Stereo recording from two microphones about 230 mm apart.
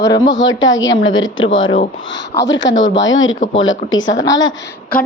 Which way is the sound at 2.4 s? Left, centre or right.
Left.